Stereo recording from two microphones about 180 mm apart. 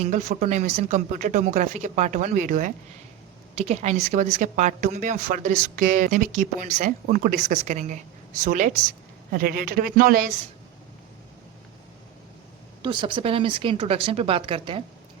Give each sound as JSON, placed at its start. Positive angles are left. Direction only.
{"t": 0.0, "sound": "a woman's voice", "side_deg": -45}
{"t": 12.8, "sound": "speech", "side_deg": -25}